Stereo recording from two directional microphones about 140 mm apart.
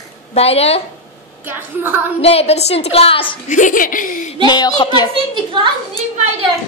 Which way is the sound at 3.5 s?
65° left (ahead or behind).